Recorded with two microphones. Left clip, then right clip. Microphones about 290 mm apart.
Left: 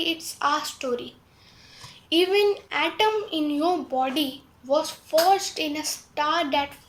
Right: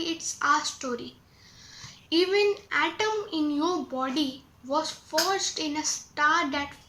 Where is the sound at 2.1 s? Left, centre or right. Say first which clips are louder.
Left 3 dB; centre.